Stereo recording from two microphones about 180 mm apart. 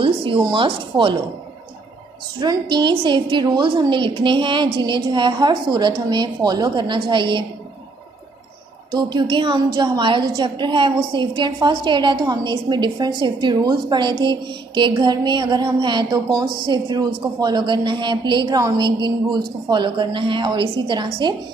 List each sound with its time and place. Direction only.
0.0 s speech: 30° right (ahead or behind)
2.4 s a woman's voice: 25° right (ahead or behind)
8.9 s a woman's voice: 25° right (ahead or behind)